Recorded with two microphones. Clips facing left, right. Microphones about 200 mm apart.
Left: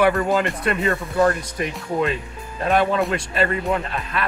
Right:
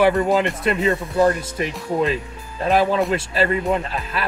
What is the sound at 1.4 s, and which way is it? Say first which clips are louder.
Speech: right 1 dB; centre (ahead or behind).